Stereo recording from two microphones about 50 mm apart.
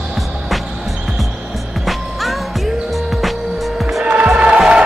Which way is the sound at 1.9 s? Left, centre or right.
Centre.